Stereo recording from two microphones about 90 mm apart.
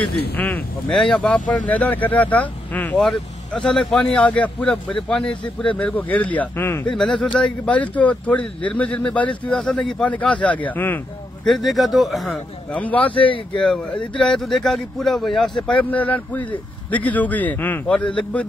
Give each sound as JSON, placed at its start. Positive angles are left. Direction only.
{"t": 0.4, "sound": "speech", "side_deg": 15}
{"t": 3.0, "sound": "speech", "side_deg": 5}
{"t": 7.0, "sound": "speech", "side_deg": 5}
{"t": 11.4, "sound": "speech", "side_deg": 0}
{"t": 12.7, "sound": "speech", "side_deg": 15}
{"t": 15.8, "sound": "speech", "side_deg": 15}